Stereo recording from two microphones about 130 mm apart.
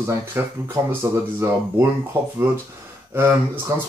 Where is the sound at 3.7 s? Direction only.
20° right (ahead or behind).